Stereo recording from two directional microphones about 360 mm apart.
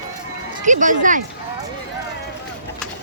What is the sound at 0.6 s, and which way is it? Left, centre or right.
Speech, right.